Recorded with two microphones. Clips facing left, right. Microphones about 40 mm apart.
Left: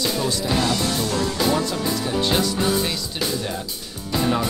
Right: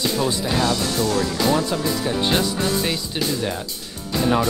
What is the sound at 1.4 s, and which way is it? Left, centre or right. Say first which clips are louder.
Speech: right 1 dB; centre.